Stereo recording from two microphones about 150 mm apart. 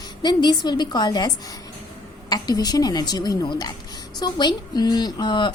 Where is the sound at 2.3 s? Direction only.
25° left (ahead or behind).